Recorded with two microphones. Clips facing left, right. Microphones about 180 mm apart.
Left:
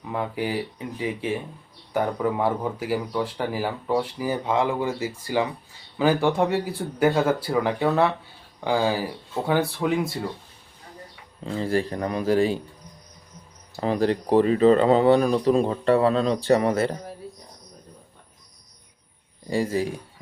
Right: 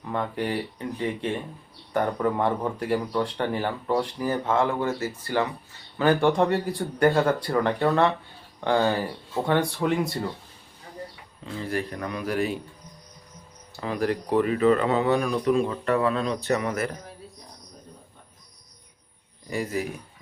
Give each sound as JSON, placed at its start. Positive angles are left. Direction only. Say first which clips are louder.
{"t": 0.0, "sound": "speech", "louder": "left 1 dB", "side_deg": 5}
{"t": 11.4, "sound": "speech", "louder": "left 5 dB", "side_deg": 30}
{"t": 13.7, "sound": "speech", "louder": "left 4 dB", "side_deg": 30}
{"t": 19.5, "sound": "speech", "louder": "left 4 dB", "side_deg": 30}